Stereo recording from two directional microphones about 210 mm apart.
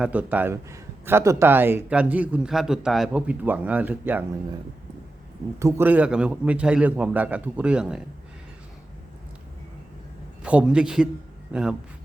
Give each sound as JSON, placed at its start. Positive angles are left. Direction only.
{"t": 0.0, "sound": "speech", "side_deg": -5}
{"t": 5.5, "sound": "speech", "side_deg": -15}
{"t": 10.4, "sound": "a man's voice", "side_deg": -5}